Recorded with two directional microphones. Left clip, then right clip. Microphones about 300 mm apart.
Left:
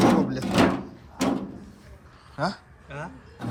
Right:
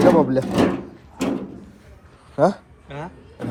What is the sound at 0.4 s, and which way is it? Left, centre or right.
Door, centre.